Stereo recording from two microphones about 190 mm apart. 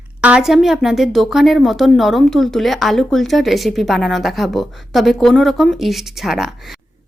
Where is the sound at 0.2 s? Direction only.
5° right (ahead or behind).